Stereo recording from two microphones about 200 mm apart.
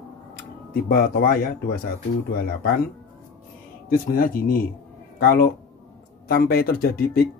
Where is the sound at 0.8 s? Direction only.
50° left (ahead or behind).